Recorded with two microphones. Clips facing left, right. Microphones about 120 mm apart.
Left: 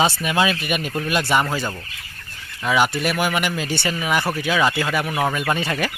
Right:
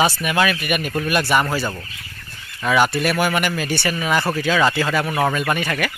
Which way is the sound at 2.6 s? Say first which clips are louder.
Right 2 dB; 15° left (ahead or behind).